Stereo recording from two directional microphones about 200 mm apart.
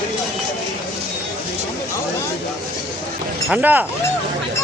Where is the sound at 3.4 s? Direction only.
5° right (ahead or behind).